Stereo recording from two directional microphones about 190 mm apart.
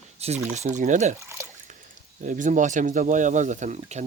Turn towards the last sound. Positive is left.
turn(degrees=-40)  # may be behind; listen again after turning